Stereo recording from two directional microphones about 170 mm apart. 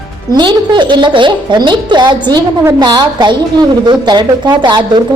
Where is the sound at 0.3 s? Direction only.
25° right (ahead or behind).